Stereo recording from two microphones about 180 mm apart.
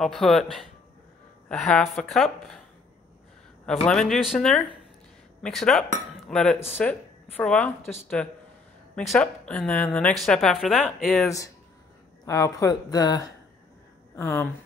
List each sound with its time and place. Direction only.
0.0 s a woman's voice: centre (ahead or behind)
3.6 s a woman's voice: 5° left (ahead or behind)
11.2 s speech: 20° left (ahead or behind)